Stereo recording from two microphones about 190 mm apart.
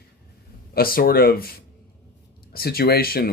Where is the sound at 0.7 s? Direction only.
50° left (ahead or behind).